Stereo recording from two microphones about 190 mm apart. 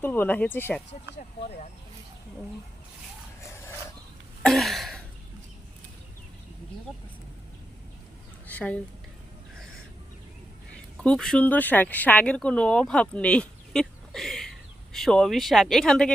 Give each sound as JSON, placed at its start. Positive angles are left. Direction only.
{"t": 0.0, "sound": "speech", "side_deg": 10}
{"t": 1.4, "sound": "speech", "side_deg": 35}
{"t": 4.4, "sound": "a sound", "side_deg": 0}
{"t": 8.4, "sound": "speech", "side_deg": 10}
{"t": 10.9, "sound": "speech", "side_deg": 5}